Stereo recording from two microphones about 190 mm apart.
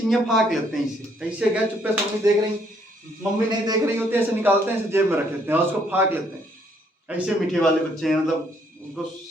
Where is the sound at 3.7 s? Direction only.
10° right (ahead or behind).